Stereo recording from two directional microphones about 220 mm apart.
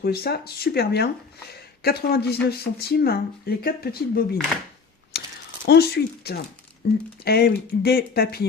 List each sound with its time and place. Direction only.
0.0 s speech: 45° left (ahead or behind)